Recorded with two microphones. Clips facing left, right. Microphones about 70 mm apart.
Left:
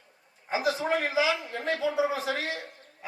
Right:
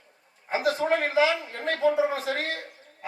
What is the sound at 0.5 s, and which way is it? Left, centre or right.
A man's voice, right.